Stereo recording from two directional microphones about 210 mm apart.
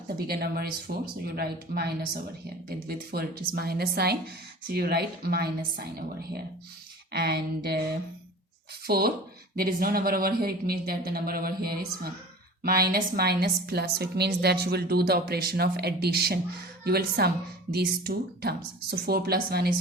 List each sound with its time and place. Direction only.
0.3 s a woman's voice: 50° right (ahead or behind)
7.1 s a woman's voice: 50° right (ahead or behind)
8.9 s a woman's voice: 45° right (ahead or behind)